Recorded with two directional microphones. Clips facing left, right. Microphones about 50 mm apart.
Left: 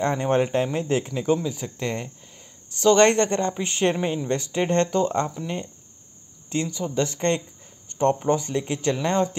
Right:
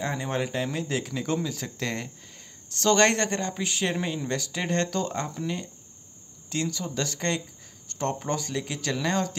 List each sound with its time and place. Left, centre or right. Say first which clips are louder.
0.0 s speech: left 7 dB; left
1.1 s speech: left 5 dB; centre
2.3 s a sound: right 1 dB; centre
3.0 s speech: left 5 dB; left
3.6 s speech: left 6 dB; left
3.9 s speech: left 4 dB; left
6.5 s speech: left 4 dB; left